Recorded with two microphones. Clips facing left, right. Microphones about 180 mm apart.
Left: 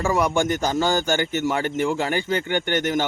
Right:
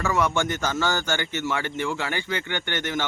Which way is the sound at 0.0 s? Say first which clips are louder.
Left 3 dB; 35° left (ahead or behind).